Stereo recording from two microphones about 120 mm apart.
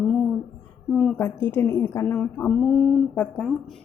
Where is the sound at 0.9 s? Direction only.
5° left (ahead or behind).